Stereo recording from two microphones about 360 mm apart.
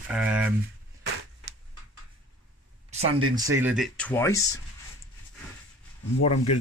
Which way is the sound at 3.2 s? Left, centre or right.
Centre.